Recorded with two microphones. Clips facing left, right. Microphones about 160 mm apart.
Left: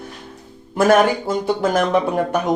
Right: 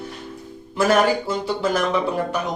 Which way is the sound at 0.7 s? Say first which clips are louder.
Left 3 dB; 50° left (ahead or behind).